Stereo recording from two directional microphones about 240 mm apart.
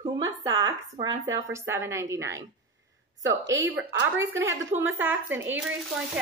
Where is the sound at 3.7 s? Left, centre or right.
Centre.